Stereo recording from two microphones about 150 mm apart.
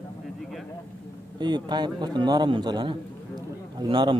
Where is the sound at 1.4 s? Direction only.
30° right (ahead or behind).